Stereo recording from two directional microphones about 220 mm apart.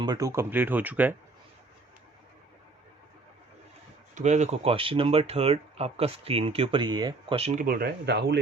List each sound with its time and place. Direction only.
0.0 s speech: 15° right (ahead or behind)
4.1 s speech: 30° right (ahead or behind); by 8.4 s 50° right (ahead or behind)